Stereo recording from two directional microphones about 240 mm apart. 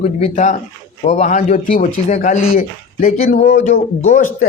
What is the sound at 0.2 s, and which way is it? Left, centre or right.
Speech, left.